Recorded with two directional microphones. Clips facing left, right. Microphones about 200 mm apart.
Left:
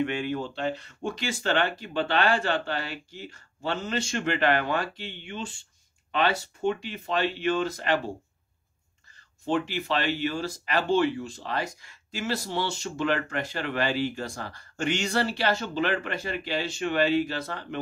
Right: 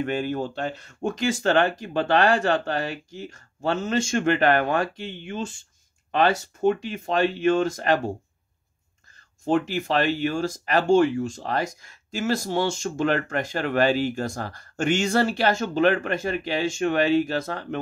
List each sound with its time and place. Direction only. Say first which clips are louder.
0.0 s speech: right 2 dB; 40° right (ahead or behind)
9.4 s speech: right 4 dB; 45° right (ahead or behind)